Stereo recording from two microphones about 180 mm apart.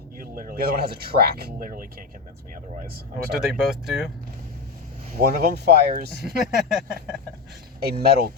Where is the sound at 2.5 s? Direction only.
50° right (ahead or behind).